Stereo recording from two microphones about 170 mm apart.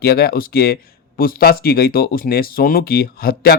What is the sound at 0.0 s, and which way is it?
Speech, 65° left (ahead or behind).